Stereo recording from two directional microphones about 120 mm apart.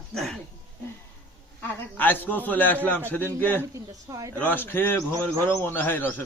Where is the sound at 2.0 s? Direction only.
15° left (ahead or behind).